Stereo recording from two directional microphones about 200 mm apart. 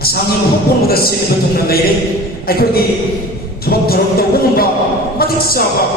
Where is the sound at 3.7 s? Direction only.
50° left (ahead or behind).